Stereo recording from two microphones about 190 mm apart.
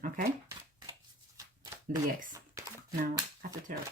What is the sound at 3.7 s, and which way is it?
Speech, 45° right (ahead or behind).